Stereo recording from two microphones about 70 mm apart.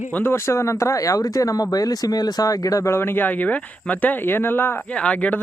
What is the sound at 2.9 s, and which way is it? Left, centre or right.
Speech, left.